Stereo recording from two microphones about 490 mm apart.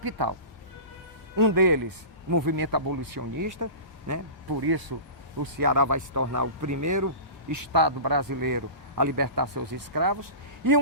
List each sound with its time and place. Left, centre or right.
0.0 s a man's voice: right
1.4 s a man's voice: right